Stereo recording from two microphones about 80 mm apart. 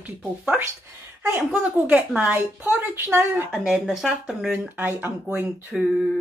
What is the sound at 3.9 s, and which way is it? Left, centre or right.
Speech, centre.